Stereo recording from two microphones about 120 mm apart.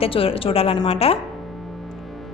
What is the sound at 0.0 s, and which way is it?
A woman's voice, 50° left (ahead or behind).